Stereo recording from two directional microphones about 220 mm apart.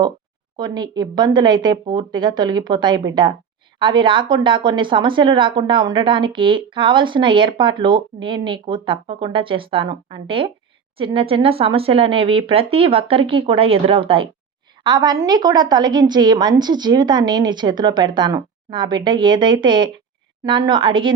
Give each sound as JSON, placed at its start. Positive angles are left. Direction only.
{"t": 0.5, "sound": "speech", "side_deg": -20}